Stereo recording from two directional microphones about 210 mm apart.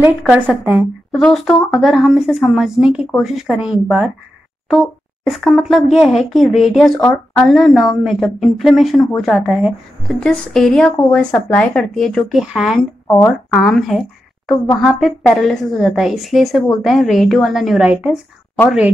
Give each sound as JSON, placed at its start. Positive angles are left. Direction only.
{"t": 0.2, "sound": "a woman's voice", "side_deg": 0}
{"t": 13.0, "sound": "a woman's voice", "side_deg": 10}